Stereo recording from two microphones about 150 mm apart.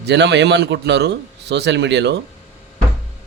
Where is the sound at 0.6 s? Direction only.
90° right.